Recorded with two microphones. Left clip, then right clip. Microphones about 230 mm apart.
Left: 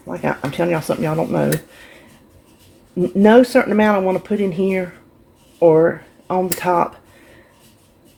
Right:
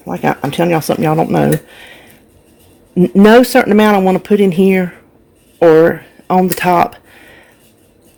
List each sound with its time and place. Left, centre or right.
0.1 s speech: right
2.9 s speech: right